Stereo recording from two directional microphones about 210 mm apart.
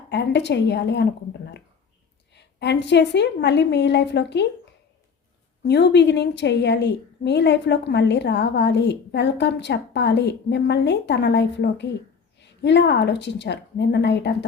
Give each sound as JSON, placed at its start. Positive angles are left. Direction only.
{"t": 0.1, "sound": "a woman's voice", "side_deg": 55}
{"t": 2.3, "sound": "a woman's voice", "side_deg": 55}
{"t": 5.6, "sound": "a woman's voice", "side_deg": 55}